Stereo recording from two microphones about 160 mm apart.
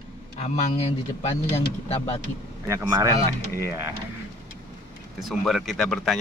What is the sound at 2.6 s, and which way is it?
Speech, 15° right (ahead or behind).